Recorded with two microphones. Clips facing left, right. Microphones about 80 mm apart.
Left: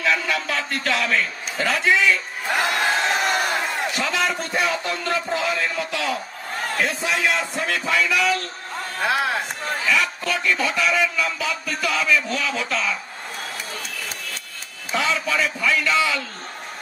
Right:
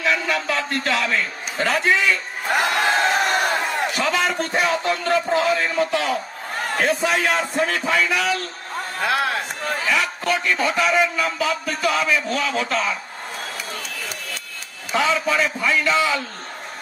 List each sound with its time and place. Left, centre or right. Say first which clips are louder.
0.1 s a man's voice: right 1 dB; right
2.6 s crowd: right 2 dB; right
4.0 s a sound: right 2 dB; right
4.6 s a sound: right 3 dB; right
6.8 s a man's voice: right 3 dB; right
9.0 s a sound: even; left
9.8 s a man's voice: right 1 dB; right
14.9 s a man's voice: right 3 dB; right
15.2 s a man's voice: right 2 dB; right